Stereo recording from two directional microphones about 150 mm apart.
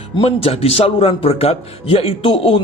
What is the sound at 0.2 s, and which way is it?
Speech, 40° left (ahead or behind).